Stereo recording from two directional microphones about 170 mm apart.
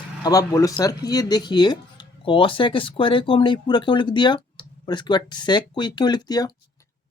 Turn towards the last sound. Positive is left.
turn(degrees=25)  # may be behind; listen again after turning